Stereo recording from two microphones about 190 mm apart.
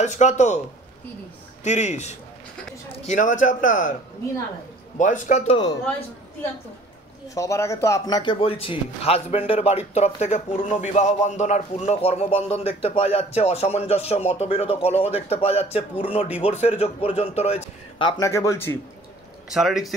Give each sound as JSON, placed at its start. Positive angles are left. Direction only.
{"t": 0.0, "sound": "speech", "side_deg": 40}
{"t": 1.6, "sound": "speech", "side_deg": 35}
{"t": 4.9, "sound": "speech", "side_deg": 40}
{"t": 7.3, "sound": "speech", "side_deg": 15}
{"t": 19.5, "sound": "speech", "side_deg": 0}